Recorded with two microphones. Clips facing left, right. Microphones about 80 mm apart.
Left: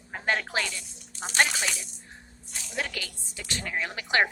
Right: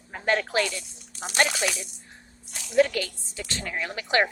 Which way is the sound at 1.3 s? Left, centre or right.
Centre.